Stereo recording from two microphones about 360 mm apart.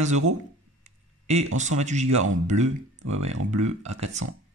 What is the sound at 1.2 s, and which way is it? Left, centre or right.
Speech, centre.